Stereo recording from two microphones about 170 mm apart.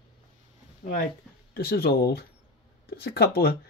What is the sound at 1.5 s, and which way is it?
Speech, 65° left (ahead or behind).